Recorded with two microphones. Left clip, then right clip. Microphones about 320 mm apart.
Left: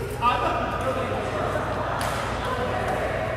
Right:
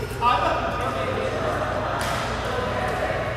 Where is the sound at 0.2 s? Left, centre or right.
Centre.